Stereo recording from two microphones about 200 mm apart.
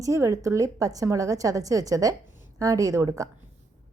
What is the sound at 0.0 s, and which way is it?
A woman's voice, 15° right (ahead or behind).